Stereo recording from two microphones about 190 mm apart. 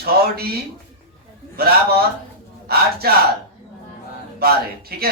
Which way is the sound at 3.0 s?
55° right (ahead or behind).